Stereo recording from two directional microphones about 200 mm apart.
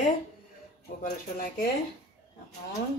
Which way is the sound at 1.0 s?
45° left (ahead or behind).